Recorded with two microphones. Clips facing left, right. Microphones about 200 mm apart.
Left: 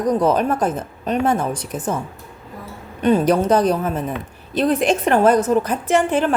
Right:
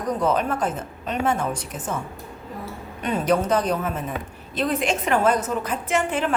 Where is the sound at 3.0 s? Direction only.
35° left (ahead or behind).